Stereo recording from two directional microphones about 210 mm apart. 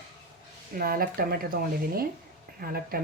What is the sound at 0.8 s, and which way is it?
Speech, 45° right (ahead or behind).